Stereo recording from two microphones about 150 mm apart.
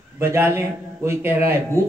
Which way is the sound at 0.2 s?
15° right (ahead or behind).